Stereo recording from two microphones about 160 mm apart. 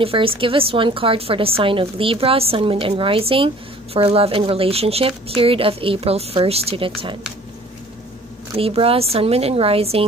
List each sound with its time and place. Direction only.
0.0 s a woman's voice: 35° right (ahead or behind)
8.5 s a woman's voice: 35° right (ahead or behind)